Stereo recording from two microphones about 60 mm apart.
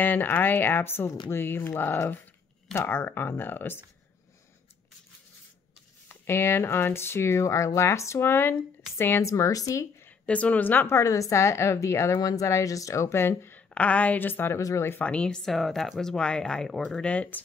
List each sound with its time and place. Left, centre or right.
0.0 s speech: left
6.2 s speech: left
9.2 s speech: left
10.2 s a woman's voice: left
10.9 s speech: left
12.2 s speech: left
13.6 s a woman's voice: left
15.0 s speech: centre
17.0 s a woman's voice: left